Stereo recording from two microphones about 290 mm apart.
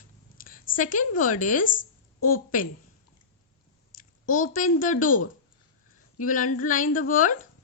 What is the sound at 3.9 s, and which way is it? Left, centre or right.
A woman's voice, left.